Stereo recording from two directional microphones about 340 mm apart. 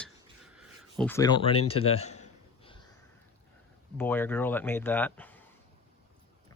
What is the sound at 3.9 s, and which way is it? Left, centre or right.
Speech, centre.